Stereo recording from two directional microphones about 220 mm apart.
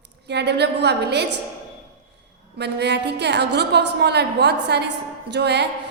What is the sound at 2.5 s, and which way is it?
A woman's voice, 50° right (ahead or behind).